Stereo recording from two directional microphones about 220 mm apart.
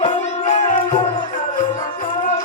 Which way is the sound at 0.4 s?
35° left (ahead or behind).